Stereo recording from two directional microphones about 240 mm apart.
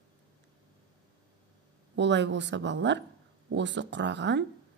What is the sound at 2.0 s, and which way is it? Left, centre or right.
Speech, right.